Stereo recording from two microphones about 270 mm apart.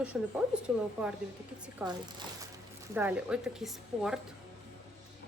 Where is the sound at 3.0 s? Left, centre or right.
Centre.